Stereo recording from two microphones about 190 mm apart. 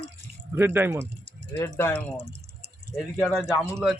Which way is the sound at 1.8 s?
10° left (ahead or behind).